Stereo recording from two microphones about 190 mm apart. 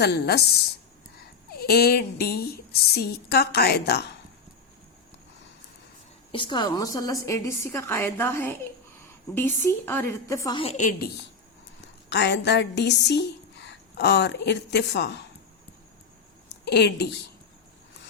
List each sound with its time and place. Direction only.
0.0 s a woman's voice: 60° left (ahead or behind)
1.5 s a woman's voice: 55° left (ahead or behind)
6.3 s a woman's voice: 25° left (ahead or behind)
10.6 s a woman's voice: 35° left (ahead or behind)
12.0 s a woman's voice: 65° left (ahead or behind)
16.6 s a woman's voice: 60° left (ahead or behind)